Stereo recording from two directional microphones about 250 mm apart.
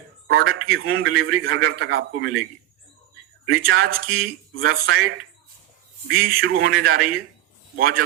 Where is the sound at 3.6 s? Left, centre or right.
Right.